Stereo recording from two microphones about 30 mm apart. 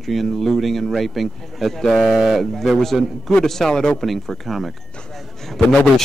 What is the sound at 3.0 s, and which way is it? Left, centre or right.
Speech, centre.